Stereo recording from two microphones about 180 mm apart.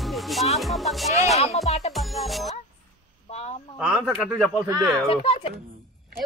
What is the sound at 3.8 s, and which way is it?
Speech, 5° right (ahead or behind).